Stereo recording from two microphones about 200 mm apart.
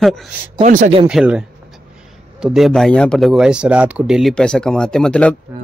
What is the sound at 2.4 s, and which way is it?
Speech, centre (ahead or behind).